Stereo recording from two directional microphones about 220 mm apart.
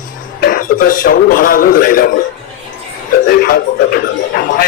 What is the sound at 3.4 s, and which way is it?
Speech, 40° left (ahead or behind).